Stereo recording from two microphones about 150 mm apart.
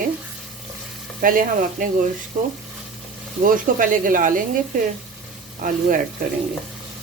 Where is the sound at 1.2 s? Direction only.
65° right (ahead or behind).